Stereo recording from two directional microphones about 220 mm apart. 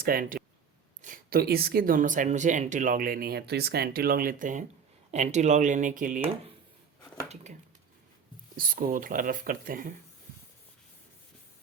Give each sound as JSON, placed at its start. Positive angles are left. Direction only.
{"t": 0.0, "sound": "speech", "side_deg": -40}
{"t": 8.5, "sound": "speech", "side_deg": -40}